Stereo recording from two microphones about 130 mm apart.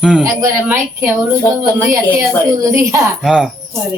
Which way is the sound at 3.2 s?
5° right (ahead or behind).